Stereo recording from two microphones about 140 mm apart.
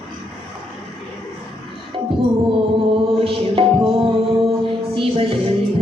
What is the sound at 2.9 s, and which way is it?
Music, 40° right (ahead or behind).